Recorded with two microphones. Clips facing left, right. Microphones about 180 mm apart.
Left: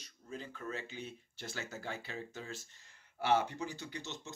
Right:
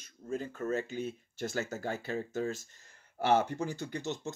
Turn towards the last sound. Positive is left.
turn(degrees=-45)  # may be behind; listen again after turning